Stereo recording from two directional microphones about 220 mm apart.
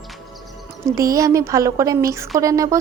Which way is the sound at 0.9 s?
15° right (ahead or behind).